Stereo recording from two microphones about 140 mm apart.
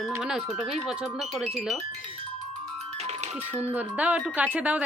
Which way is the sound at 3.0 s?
50° right (ahead or behind).